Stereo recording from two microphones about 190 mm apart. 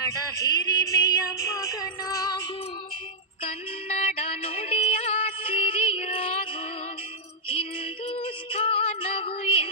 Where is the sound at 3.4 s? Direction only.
30° left (ahead or behind).